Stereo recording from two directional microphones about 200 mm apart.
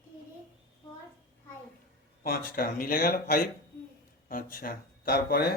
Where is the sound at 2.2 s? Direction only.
45° left (ahead or behind).